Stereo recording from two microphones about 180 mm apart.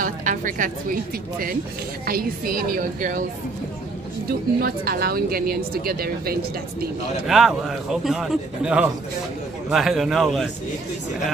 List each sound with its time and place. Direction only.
0.0 s music: 50° right (ahead or behind)
2.0 s a woman's voice: 55° right (ahead or behind)
4.6 s speech: 55° right (ahead or behind)
7.2 s a man's voice: centre (ahead or behind)